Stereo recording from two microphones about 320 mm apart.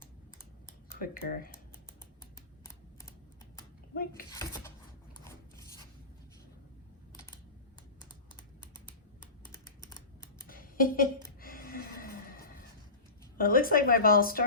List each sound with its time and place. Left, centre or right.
0.9 s speech: left
4.1 s speech: centre
5.2 s filing: centre
10.5 s a sound: left
13.4 s speech: left